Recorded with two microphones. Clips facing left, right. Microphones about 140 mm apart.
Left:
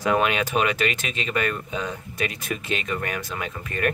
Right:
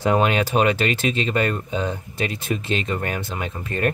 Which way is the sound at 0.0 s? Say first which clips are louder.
Right 3 dB; 30° right (ahead or behind).